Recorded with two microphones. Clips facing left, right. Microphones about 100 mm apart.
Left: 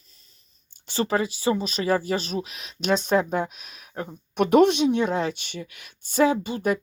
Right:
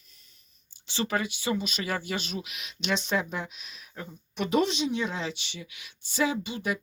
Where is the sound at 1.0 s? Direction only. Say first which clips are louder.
Left 6 dB; 30° left (ahead or behind).